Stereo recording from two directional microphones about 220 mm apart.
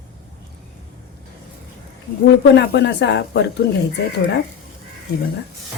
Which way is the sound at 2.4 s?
50° left (ahead or behind).